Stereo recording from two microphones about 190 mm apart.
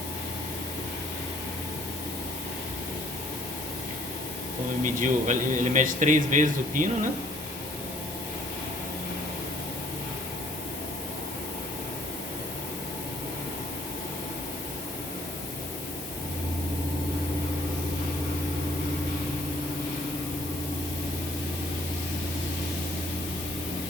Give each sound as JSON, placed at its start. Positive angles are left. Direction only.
{"t": 4.8, "sound": "speech", "side_deg": -45}